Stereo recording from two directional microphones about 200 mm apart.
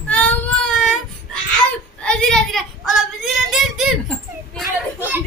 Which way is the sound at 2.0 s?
5° left (ahead or behind).